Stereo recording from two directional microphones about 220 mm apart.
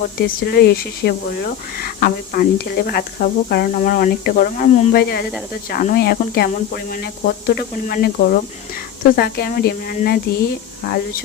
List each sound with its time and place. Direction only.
0.0 s speech: 45° left (ahead or behind)